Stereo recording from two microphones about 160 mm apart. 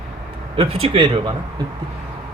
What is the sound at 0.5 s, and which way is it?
Speech, 40° right (ahead or behind).